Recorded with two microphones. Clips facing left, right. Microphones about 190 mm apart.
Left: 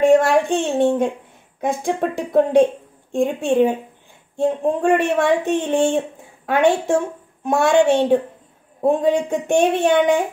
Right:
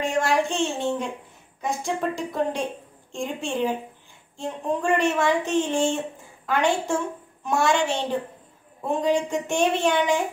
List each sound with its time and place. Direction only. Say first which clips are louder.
0.0 s a woman's voice: left 9 dB; 55° left (ahead or behind)